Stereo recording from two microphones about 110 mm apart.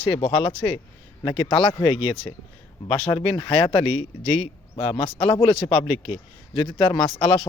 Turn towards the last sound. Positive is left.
turn(degrees=45)  # may be behind; listen again after turning